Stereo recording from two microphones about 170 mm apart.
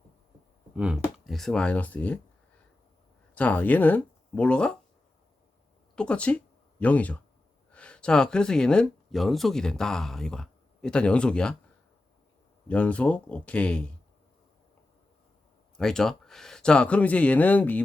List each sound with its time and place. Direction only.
0.8 s speech: 5° right (ahead or behind)
3.3 s speech: 10° left (ahead or behind)
6.0 s speech: 5° left (ahead or behind)
12.6 s speech: 5° left (ahead or behind)
15.8 s speech: 5° left (ahead or behind)